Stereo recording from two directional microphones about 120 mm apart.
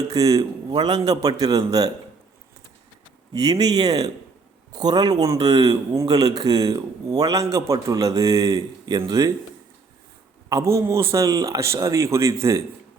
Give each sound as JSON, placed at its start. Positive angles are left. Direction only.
{"t": 0.1, "sound": "a man's voice", "side_deg": -30}
{"t": 3.3, "sound": "a man's voice", "side_deg": -30}
{"t": 10.5, "sound": "a man's voice", "side_deg": -25}